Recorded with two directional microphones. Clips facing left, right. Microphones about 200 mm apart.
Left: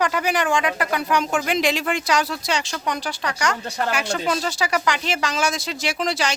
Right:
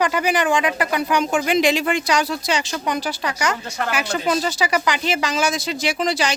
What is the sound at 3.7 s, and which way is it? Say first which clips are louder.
Speech: left 1 dB; 35° left (ahead or behind).